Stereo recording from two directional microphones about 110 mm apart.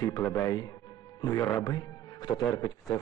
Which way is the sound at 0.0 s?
35° left (ahead or behind).